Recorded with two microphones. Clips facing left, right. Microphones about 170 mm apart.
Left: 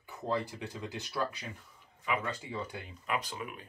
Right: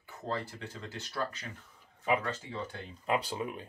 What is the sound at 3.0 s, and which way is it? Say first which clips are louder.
Speech: right 5 dB; 30° right (ahead or behind).